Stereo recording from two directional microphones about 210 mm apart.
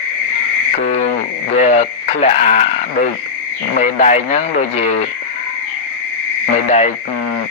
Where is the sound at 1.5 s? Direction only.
30° left (ahead or behind).